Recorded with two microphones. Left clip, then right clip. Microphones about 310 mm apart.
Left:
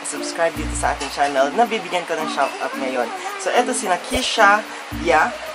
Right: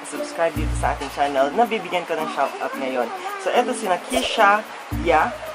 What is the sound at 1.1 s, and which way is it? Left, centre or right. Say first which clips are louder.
A woman's voice: left 2 dB; centre.